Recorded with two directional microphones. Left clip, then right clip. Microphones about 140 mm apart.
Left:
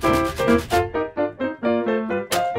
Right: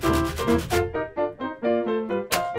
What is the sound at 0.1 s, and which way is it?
Music, 35° left (ahead or behind).